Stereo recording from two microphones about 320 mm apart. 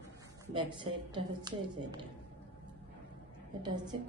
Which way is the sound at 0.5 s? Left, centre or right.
Centre.